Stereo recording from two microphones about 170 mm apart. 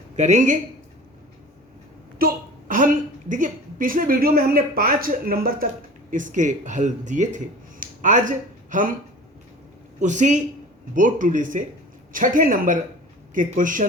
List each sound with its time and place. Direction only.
0.2 s speech: 45° right (ahead or behind)
2.1 s a woman's voice: 55° right (ahead or behind)
10.0 s speech: 45° right (ahead or behind)